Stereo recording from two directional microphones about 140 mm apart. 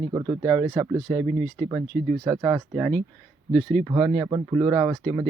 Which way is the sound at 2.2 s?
20° right (ahead or behind).